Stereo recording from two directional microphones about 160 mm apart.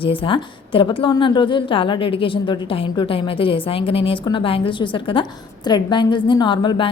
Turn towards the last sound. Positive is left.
turn(degrees=30)  # may be behind; listen again after turning